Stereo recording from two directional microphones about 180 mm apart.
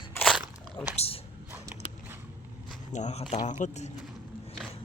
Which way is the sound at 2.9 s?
40° left (ahead or behind).